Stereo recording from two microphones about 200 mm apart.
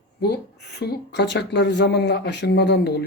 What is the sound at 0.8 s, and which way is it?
Speech, 55° left (ahead or behind).